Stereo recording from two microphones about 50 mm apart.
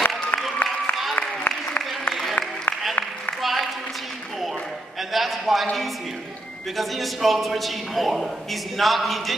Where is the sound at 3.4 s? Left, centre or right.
Centre.